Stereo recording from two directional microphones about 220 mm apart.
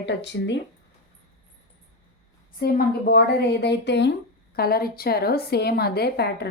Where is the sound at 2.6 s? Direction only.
45° left (ahead or behind).